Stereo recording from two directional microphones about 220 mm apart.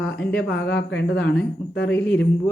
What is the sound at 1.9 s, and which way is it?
Speech, 5° left (ahead or behind).